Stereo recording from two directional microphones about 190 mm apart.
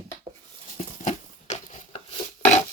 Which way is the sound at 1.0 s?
35° left (ahead or behind).